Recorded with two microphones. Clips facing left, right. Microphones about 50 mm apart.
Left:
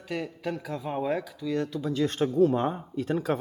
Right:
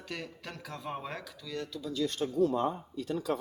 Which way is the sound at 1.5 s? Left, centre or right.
Left.